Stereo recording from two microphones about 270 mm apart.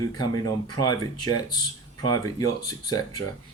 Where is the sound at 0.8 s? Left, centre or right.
Centre.